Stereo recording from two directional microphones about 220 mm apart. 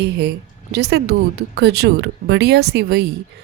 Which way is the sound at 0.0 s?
50° right (ahead or behind).